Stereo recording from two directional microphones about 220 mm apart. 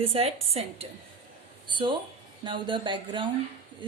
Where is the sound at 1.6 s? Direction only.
20° right (ahead or behind).